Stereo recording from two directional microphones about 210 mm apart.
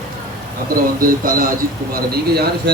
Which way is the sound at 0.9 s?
40° right (ahead or behind).